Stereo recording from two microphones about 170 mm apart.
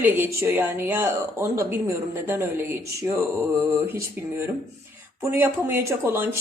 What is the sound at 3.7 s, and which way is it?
Speech, 15° right (ahead or behind).